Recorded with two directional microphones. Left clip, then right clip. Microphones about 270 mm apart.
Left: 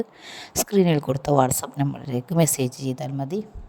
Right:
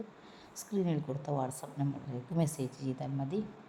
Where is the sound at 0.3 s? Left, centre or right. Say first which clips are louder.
Left 18 dB; left.